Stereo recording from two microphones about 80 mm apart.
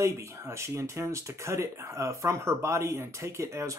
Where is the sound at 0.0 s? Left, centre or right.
Right.